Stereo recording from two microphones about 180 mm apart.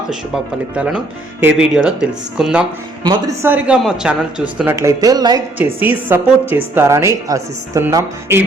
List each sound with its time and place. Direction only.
0.8 s speech: 10° right (ahead or behind)
3.0 s speech: 20° right (ahead or behind)
5.5 s speech: 10° right (ahead or behind)